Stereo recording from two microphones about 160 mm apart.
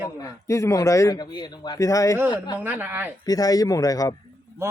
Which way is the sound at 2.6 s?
15° right (ahead or behind).